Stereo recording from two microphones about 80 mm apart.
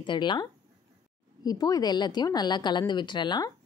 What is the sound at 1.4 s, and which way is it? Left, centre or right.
A woman's voice, left.